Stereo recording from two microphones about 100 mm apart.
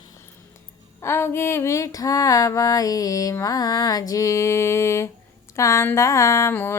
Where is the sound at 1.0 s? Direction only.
25° left (ahead or behind).